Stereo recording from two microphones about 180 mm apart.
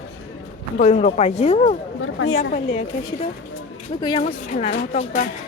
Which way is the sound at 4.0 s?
25° left (ahead or behind).